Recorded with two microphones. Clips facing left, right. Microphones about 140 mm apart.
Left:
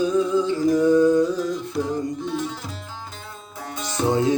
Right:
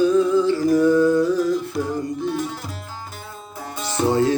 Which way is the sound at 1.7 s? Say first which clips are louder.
Right 1 dB; 5° right (ahead or behind).